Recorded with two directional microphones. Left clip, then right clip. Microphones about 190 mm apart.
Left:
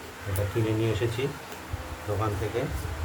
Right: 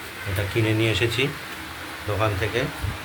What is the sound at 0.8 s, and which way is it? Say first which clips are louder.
Speech: right 6 dB; 15° right (ahead or behind).